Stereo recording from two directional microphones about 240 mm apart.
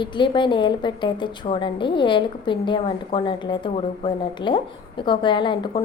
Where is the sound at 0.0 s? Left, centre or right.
Centre.